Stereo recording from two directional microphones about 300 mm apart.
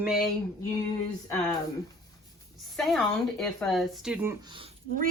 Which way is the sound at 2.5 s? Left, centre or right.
Centre.